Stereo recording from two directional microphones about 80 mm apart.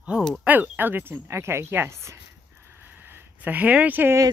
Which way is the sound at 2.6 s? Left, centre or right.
Right.